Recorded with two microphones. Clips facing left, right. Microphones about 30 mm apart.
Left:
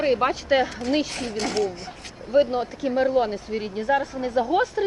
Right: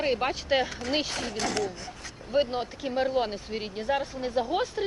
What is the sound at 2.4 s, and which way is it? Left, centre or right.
A man's voice, centre.